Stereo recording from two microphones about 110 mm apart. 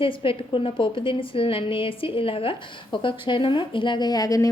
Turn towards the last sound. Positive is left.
turn(degrees=30)  # may be behind; listen again after turning